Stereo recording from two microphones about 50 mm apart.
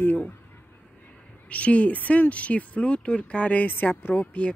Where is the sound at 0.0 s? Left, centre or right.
Left.